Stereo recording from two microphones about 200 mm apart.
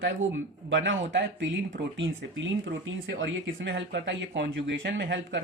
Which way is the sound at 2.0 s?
75° right (ahead or behind).